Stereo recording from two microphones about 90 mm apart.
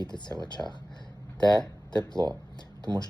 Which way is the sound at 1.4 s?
55° left (ahead or behind).